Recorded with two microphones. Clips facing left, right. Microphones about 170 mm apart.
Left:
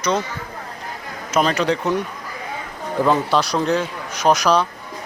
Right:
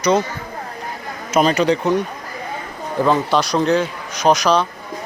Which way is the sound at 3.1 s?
5° left (ahead or behind).